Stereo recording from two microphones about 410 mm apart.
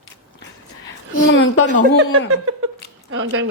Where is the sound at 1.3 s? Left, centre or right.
Left.